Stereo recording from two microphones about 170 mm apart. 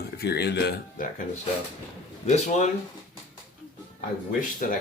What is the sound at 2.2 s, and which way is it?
Speech, 40° left (ahead or behind).